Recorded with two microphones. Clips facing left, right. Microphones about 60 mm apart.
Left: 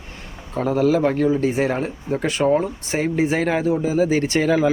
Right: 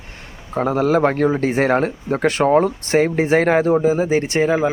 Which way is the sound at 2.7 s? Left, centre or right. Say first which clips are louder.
Right 7 dB; right.